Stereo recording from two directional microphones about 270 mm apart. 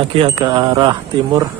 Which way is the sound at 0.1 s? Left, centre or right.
Centre.